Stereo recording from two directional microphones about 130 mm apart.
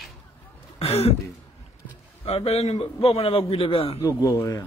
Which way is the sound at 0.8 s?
50° left (ahead or behind).